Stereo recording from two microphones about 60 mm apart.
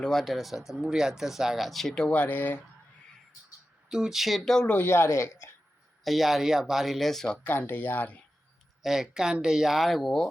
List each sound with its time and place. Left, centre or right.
0.0 s speech: centre
2.0 s speech: left
3.8 s speech: centre
4.8 s speech: left
6.1 s speech: centre
7.4 s speech: left
8.8 s speech: centre